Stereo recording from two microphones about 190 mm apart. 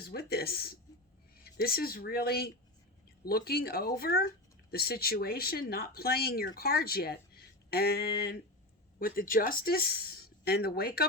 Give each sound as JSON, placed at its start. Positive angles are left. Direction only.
{"t": 0.0, "sound": "speech", "side_deg": 55}